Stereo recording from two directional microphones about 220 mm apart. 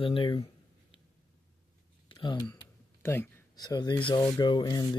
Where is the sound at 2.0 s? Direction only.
20° left (ahead or behind).